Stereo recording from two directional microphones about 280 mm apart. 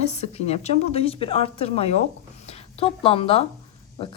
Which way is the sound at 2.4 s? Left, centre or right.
Left.